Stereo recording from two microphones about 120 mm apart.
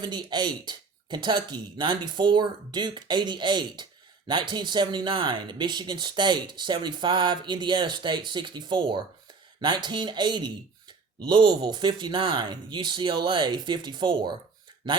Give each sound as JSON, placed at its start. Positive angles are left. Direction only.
{"t": 0.0, "sound": "speech", "side_deg": -35}